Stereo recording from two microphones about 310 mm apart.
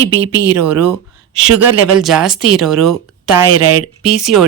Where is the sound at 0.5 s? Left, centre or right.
Right.